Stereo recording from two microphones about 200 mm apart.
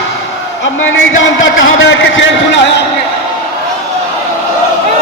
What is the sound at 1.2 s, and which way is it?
A man's voice, 75° left (ahead or behind).